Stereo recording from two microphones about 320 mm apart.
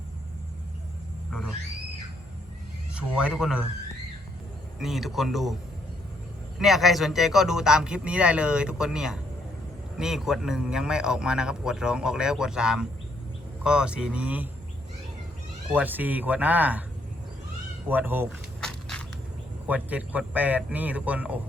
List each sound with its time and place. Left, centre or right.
2.9 s a man's voice: centre
4.8 s a man's voice: centre
6.6 s a man's voice: centre
15.7 s a man's voice: centre
17.8 s a sound: centre
19.6 s a man's voice: centre